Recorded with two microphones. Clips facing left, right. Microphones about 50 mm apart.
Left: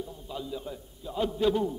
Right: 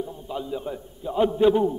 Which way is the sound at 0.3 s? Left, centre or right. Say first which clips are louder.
Right 6 dB; right.